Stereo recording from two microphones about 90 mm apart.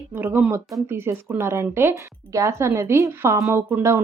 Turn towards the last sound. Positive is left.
turn(degrees=-20)  # may be behind; listen again after turning